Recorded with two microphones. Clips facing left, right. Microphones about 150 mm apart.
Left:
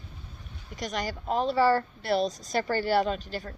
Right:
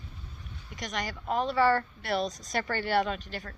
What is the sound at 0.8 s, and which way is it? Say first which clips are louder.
A woman's voice: left 3 dB; 35° left (ahead or behind).